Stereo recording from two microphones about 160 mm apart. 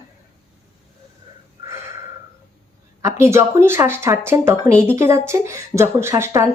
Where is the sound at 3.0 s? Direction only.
15° right (ahead or behind).